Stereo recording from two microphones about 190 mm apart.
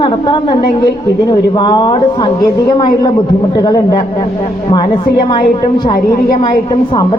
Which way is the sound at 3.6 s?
20° left (ahead or behind).